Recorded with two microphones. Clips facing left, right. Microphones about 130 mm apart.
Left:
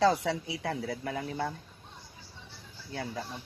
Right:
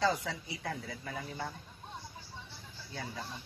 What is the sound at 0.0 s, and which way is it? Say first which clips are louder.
Speech: left 6 dB; 70° left (ahead or behind).